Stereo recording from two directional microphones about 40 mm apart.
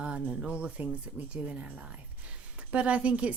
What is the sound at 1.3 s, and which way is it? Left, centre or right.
Speech, right.